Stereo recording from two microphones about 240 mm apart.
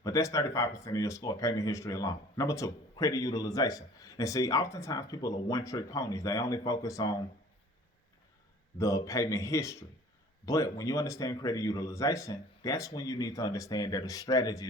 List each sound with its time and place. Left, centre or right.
0.0 s speech: centre
8.8 s speech: centre